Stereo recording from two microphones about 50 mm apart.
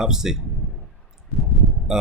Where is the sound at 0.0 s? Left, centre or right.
Centre.